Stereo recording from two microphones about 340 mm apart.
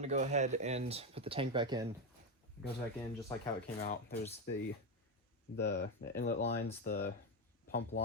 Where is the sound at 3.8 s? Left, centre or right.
Left.